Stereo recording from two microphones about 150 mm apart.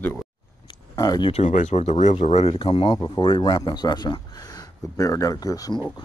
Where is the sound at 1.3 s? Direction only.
50° left (ahead or behind); by 3.0 s 35° left (ahead or behind).